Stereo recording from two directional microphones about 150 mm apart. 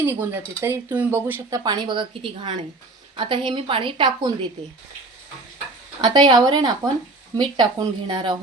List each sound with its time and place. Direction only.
0.0 s a woman's voice: 15° right (ahead or behind); by 4.3 s 30° right (ahead or behind)
6.0 s a woman's voice: 30° right (ahead or behind)